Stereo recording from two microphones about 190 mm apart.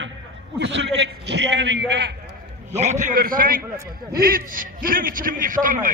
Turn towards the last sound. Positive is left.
turn(degrees=-45)  # may be behind; listen again after turning